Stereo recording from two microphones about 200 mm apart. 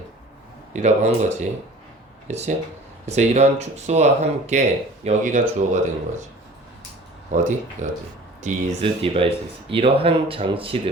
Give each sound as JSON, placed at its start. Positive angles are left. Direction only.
{"t": 0.7, "sound": "speech", "side_deg": -35}
{"t": 7.3, "sound": "speech", "side_deg": -35}